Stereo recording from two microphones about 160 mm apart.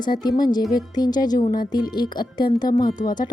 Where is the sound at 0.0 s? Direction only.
25° left (ahead or behind).